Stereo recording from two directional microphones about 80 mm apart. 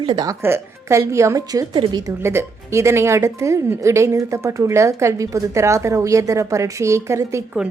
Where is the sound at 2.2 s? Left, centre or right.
Right.